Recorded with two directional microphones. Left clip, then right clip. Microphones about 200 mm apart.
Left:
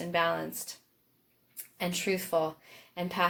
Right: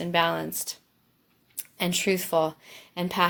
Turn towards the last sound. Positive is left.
turn(degrees=-40)  # may be behind; listen again after turning